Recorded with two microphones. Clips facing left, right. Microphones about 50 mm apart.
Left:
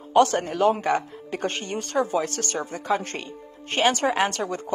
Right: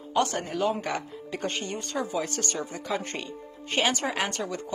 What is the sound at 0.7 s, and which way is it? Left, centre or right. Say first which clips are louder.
Speech: left 7 dB; left.